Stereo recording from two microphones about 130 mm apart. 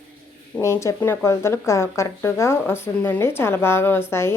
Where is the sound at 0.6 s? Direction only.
20° left (ahead or behind).